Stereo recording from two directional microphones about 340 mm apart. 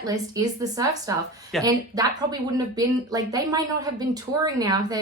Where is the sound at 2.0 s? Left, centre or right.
Centre.